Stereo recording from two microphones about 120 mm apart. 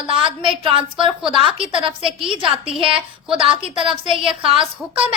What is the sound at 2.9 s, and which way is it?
A woman's voice, 45° right (ahead or behind).